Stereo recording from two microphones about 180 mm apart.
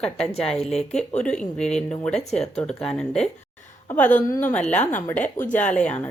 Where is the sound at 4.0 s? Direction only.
45° left (ahead or behind).